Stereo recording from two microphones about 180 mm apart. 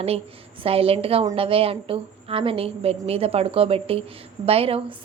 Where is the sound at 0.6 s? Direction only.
30° right (ahead or behind).